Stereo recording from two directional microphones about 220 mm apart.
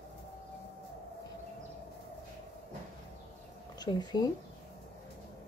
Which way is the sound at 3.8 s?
20° left (ahead or behind).